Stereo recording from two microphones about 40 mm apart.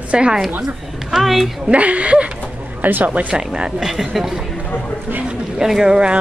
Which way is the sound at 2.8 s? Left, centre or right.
Right.